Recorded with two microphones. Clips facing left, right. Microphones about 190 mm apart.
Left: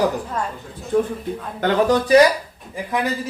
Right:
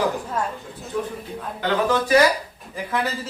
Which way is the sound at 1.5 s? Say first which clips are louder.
Left 4 dB; 45° left (ahead or behind).